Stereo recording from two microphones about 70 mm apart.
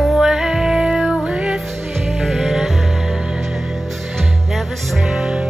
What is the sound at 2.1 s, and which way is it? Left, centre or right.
Music, centre.